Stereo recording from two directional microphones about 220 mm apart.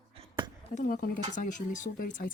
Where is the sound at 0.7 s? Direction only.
35° left (ahead or behind).